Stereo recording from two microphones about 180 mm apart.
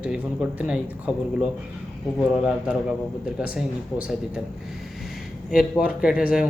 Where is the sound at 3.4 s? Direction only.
5° right (ahead or behind).